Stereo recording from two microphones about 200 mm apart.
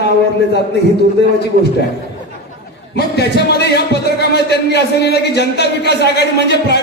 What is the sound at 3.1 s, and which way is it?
Speech, 55° left (ahead or behind).